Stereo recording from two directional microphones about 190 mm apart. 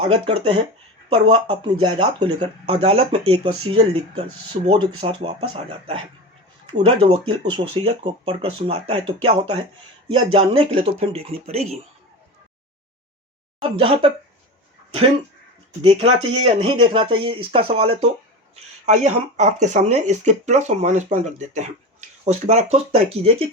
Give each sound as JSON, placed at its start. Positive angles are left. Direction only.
{"t": 0.0, "sound": "speech", "side_deg": -30}
{"t": 6.7, "sound": "speech", "side_deg": -25}
{"t": 10.3, "sound": "speech", "side_deg": -30}
{"t": 13.6, "sound": "speech", "side_deg": -30}
{"t": 15.8, "sound": "speech", "side_deg": -35}